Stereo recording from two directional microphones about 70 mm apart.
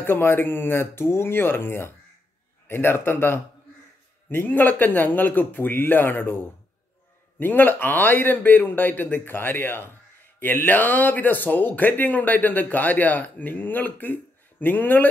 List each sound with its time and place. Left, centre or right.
0.0 s speech: left